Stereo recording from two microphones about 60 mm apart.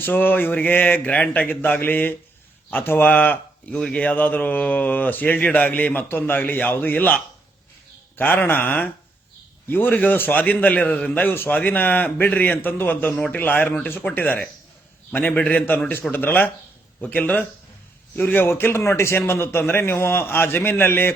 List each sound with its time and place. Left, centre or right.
0.0 s a man's voice: left
3.7 s a man's voice: centre
18.2 s a man's voice: left
18.8 s a man's voice: left